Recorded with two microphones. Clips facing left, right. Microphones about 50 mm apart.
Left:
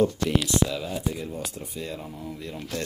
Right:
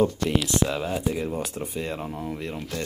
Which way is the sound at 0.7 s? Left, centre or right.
Right.